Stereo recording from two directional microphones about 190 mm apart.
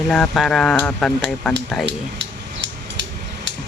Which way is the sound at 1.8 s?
65° right (ahead or behind).